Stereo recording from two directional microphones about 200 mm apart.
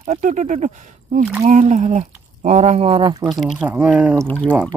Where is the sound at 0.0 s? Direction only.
35° right (ahead or behind).